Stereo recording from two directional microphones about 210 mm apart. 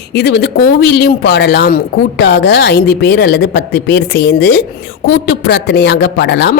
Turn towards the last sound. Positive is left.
turn(degrees=55)  # may be behind; listen again after turning